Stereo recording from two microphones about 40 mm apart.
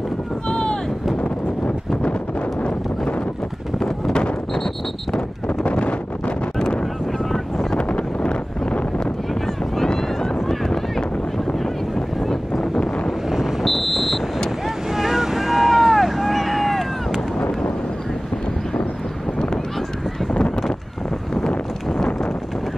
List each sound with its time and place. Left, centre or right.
0.5 s boat: left
5.1 s a sound: left
7.7 s vehicle: left
13.3 s vehicle: centre
15.0 s boat: centre
21.4 s a sound: left